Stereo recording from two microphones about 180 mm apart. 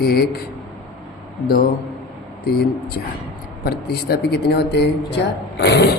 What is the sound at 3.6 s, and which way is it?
A man's voice, 60° left (ahead or behind).